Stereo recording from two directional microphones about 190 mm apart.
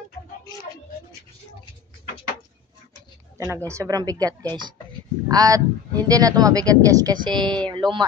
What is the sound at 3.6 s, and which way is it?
A woman's voice, 15° right (ahead or behind).